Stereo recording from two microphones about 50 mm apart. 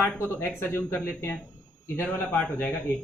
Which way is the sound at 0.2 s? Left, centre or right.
Left.